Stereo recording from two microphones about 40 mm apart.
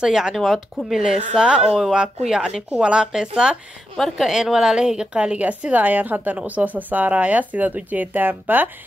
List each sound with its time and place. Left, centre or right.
0.0 s speech: centre
0.5 s speech: centre
1.0 s speech: centre
2.8 s a woman's voice: right
4.0 s speech: centre
4.7 s a woman's voice: right
5.4 s a woman's voice: right